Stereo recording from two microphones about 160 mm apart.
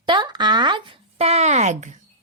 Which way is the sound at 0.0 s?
30° right (ahead or behind).